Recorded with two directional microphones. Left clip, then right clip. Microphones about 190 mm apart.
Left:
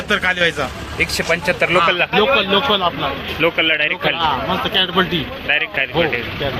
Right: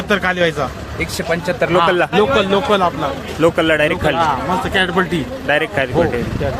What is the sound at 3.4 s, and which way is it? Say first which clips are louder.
Speech: right 2 dB; 35° right (ahead or behind).